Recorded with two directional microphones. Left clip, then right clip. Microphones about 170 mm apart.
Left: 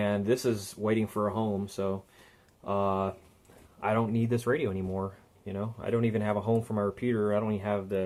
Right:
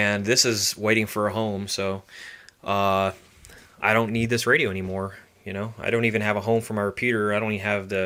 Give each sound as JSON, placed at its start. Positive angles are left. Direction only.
{"t": 0.0, "sound": "speech", "side_deg": -20}
{"t": 4.9, "sound": "speech", "side_deg": -30}
{"t": 5.8, "sound": "speech", "side_deg": -15}
{"t": 6.7, "sound": "speech", "side_deg": -30}
{"t": 7.0, "sound": "speech", "side_deg": -15}